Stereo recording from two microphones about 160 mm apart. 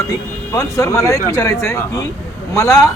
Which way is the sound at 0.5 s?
20° left (ahead or behind).